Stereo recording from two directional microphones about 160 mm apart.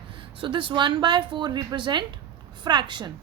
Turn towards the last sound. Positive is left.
turn(degrees=-30)  # may be behind; listen again after turning